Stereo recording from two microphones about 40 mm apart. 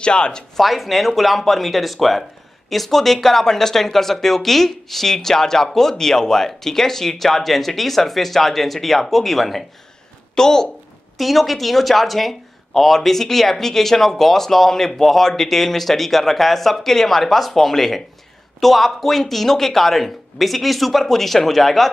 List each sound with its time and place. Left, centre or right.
0.0 s speech: left
0.6 s speech: centre
10.3 s speech: centre
11.1 s speech: centre